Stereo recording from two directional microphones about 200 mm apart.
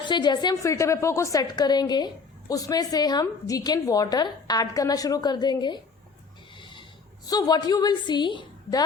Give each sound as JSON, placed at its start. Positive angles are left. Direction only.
{"t": 0.0, "sound": "a woman's voice", "side_deg": 20}
{"t": 6.6, "sound": "a sound", "side_deg": 25}
{"t": 7.3, "sound": "a woman's voice", "side_deg": 20}